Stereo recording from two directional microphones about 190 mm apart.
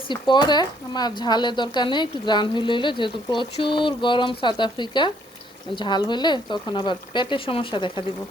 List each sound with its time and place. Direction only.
0.1 s speech: 25° left (ahead or behind)